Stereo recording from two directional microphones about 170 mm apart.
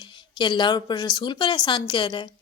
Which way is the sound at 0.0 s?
30° left (ahead or behind).